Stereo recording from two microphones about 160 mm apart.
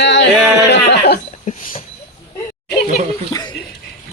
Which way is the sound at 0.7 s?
85° left.